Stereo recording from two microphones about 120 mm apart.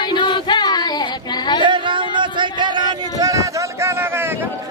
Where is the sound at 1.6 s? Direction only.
40° right (ahead or behind).